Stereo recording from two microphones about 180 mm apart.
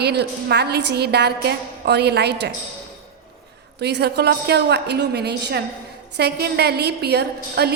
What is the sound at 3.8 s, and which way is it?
A woman's voice, 65° right (ahead or behind).